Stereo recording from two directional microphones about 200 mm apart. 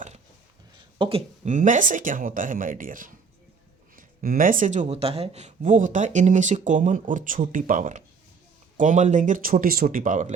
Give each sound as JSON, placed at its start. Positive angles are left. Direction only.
{"t": 0.9, "sound": "speech", "side_deg": -25}
{"t": 1.5, "sound": "speech", "side_deg": -40}